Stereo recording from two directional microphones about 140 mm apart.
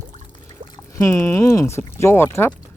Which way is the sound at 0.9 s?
20° left (ahead or behind).